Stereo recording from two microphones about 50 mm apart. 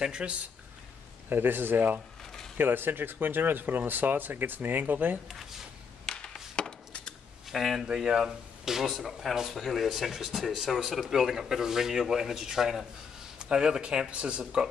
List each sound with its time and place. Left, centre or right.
0.0 s speech: centre
1.3 s speech: right
6.0 s a sound: centre
7.4 s speech: centre; by 14.4 s right